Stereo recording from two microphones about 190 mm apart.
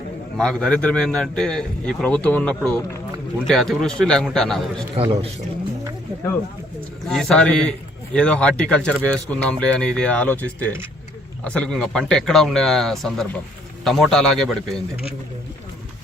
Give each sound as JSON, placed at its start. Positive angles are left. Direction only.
{"t": 0.3, "sound": "a man's voice", "side_deg": 5}
{"t": 4.9, "sound": "a man's voice", "side_deg": -30}
{"t": 7.1, "sound": "a man's voice", "side_deg": 5}